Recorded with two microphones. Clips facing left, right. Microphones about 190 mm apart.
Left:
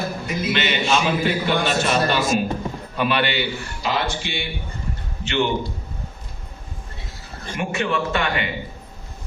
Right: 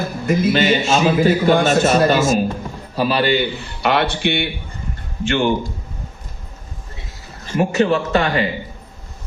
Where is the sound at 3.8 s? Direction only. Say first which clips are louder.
Right 7 dB; 65° right (ahead or behind).